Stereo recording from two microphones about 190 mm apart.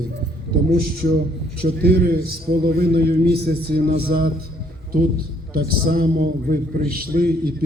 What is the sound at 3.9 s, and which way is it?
Speech, 30° right (ahead or behind).